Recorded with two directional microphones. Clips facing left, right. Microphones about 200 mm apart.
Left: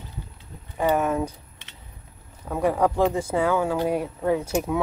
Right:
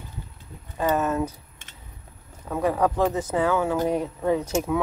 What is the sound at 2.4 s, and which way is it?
Speech, 10° left (ahead or behind).